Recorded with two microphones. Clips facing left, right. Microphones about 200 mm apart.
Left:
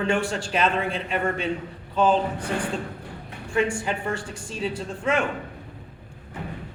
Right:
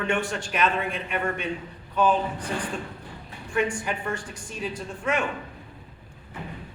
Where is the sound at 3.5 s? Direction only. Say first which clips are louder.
Left 2 dB; 25° left (ahead or behind).